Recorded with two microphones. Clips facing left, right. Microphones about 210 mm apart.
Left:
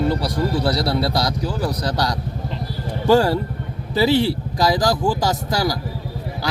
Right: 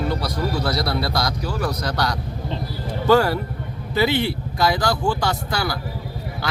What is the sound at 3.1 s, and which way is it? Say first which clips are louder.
Speech: left 1 dB; 30° left (ahead or behind).